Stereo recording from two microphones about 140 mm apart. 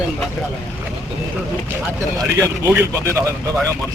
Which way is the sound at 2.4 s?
20° right (ahead or behind).